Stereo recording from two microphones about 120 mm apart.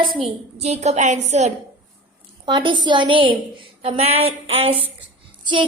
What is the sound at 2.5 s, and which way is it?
Speech, 40° right (ahead or behind).